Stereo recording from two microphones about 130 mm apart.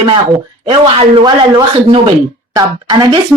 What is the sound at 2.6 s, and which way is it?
Speech, 30° right (ahead or behind).